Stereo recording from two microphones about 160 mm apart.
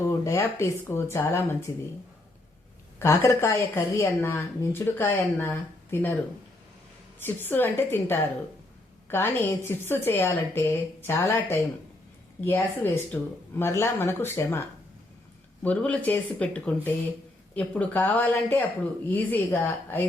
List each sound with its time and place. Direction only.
0.3 s speech: 15° left (ahead or behind)
3.0 s speech: 15° left (ahead or behind)
7.3 s speech: 10° left (ahead or behind)
15.6 s speech: 5° left (ahead or behind)